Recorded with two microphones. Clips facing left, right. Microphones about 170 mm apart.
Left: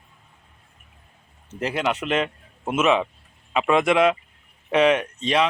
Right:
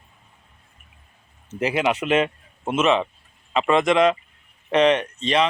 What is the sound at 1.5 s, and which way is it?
A man's voice, 5° right (ahead or behind).